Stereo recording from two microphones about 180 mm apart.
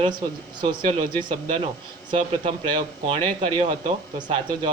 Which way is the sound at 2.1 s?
30° right (ahead or behind).